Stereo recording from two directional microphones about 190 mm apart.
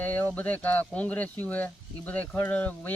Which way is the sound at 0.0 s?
10° left (ahead or behind).